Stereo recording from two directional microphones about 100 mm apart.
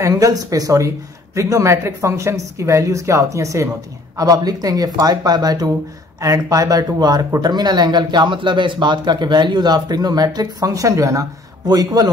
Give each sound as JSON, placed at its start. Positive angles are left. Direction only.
{"t": 0.0, "sound": "speech", "side_deg": -35}